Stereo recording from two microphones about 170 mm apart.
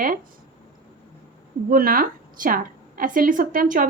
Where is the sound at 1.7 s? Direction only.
55° right (ahead or behind).